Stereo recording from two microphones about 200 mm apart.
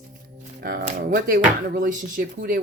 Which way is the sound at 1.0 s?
45° right (ahead or behind).